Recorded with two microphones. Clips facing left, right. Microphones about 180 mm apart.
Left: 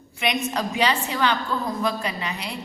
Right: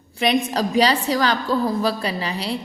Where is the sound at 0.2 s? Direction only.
35° right (ahead or behind).